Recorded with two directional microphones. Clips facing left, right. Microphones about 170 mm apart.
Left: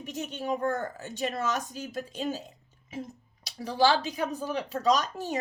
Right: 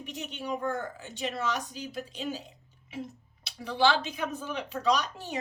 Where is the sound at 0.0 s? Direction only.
45° left (ahead or behind).